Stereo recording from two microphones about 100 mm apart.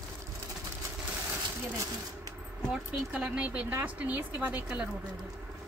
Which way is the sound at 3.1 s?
15° right (ahead or behind).